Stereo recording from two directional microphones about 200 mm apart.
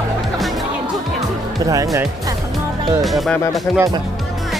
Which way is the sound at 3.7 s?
5° left (ahead or behind).